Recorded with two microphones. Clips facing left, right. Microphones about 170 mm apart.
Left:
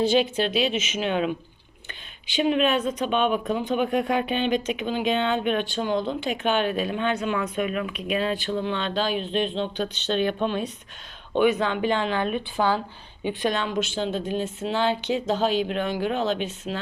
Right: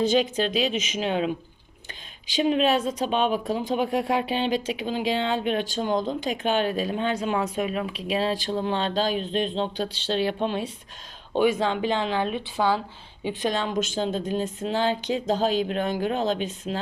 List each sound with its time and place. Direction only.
0.0 s speech: 40° right (ahead or behind)
2.4 s speech: 30° right (ahead or behind)
12.3 s speech: 15° right (ahead or behind)
13.2 s speech: 35° right (ahead or behind)